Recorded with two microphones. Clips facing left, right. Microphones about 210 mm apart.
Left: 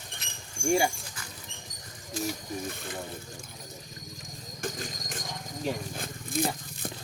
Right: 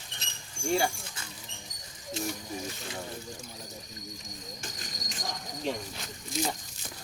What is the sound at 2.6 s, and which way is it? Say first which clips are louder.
Ratchet: left 2 dB; 55° left (ahead or behind).